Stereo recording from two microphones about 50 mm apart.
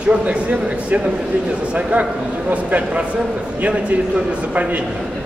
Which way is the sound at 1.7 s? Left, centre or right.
Right.